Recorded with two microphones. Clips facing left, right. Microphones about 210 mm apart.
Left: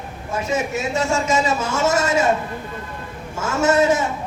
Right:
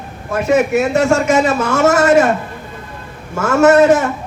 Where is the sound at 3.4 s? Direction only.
65° right (ahead or behind).